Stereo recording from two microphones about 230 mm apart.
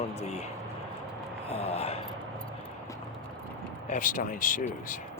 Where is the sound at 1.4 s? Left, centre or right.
Left.